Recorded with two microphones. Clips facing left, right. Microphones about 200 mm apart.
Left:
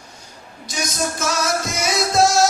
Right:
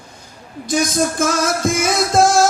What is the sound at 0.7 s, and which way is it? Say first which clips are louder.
Music: right 8 dB; 55° right (ahead or behind).